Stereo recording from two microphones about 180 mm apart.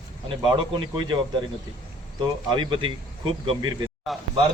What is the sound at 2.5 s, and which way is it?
Speech, 25° right (ahead or behind).